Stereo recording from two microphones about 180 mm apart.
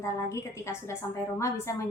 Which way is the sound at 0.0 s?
15° left (ahead or behind).